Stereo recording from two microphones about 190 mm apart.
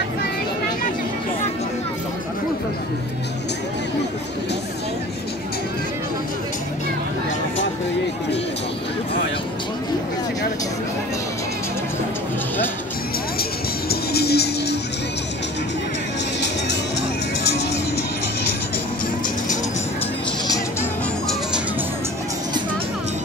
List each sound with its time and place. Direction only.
13.4 s music: 55° left (ahead or behind)